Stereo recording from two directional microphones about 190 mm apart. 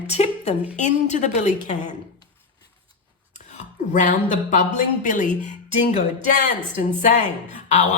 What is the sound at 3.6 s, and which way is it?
Speech, 40° left (ahead or behind).